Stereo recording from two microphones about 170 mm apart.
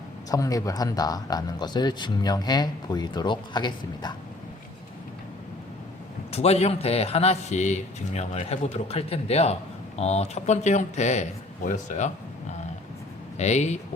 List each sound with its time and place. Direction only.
0.3 s speech: 20° left (ahead or behind)
6.3 s a man's voice: 35° left (ahead or behind)